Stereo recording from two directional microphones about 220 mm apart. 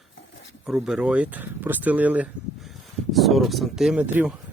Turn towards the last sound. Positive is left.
turn(degrees=-5)  # may be behind; listen again after turning